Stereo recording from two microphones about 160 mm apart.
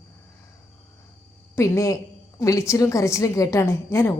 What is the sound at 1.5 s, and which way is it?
A woman's voice, 20° left (ahead or behind).